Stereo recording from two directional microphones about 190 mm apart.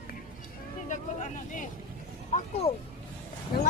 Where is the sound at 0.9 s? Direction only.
40° left (ahead or behind).